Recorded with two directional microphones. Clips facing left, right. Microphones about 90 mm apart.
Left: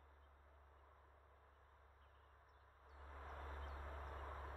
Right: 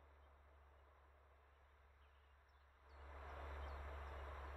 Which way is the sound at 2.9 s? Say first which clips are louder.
Left 1 dB; 35° left (ahead or behind).